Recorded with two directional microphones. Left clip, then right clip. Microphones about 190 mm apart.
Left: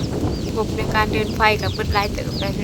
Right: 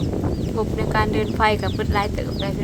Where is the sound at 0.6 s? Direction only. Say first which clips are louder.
Left 2 dB; 15° left (ahead or behind).